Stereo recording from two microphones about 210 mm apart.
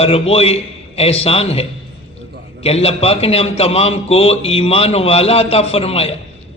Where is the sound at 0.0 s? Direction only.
30° left (ahead or behind).